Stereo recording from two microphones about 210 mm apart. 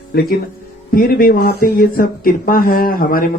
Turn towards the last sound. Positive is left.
turn(degrees=45)  # may be behind; listen again after turning